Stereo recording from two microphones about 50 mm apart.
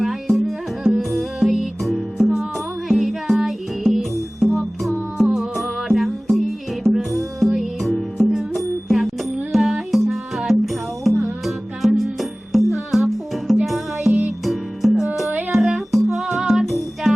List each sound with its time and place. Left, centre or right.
0.0 s music: centre
15.3 s music: right
15.5 s music: centre